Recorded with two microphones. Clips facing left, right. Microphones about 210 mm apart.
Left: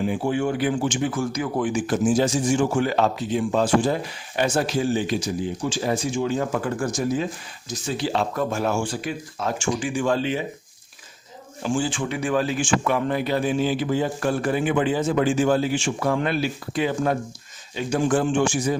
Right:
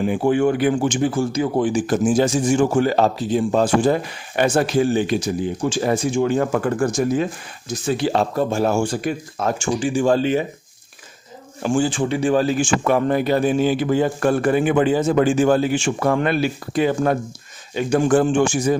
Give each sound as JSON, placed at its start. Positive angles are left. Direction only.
{"t": 0.0, "sound": "speech", "side_deg": -60}
{"t": 1.0, "sound": "speech", "side_deg": -30}
{"t": 2.0, "sound": "a man's voice", "side_deg": -55}
{"t": 9.8, "sound": "speech", "side_deg": -30}
{"t": 11.6, "sound": "a man's voice", "side_deg": -50}
{"t": 11.9, "sound": "a man's voice", "side_deg": -30}